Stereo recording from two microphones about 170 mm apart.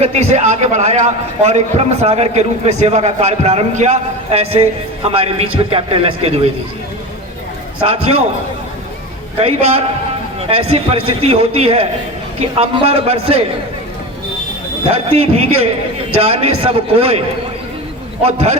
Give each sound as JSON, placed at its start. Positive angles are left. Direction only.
{"t": 0.0, "sound": "a man's voice", "side_deg": -40}
{"t": 7.8, "sound": "a man's voice", "side_deg": -35}
{"t": 10.5, "sound": "a man's voice", "side_deg": -35}
{"t": 14.8, "sound": "a man's voice", "side_deg": -35}
{"t": 18.2, "sound": "a man's voice", "side_deg": -40}